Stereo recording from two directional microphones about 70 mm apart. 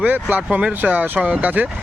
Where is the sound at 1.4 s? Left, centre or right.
Right.